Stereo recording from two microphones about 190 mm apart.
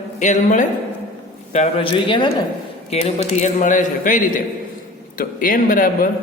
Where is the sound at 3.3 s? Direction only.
40° left (ahead or behind).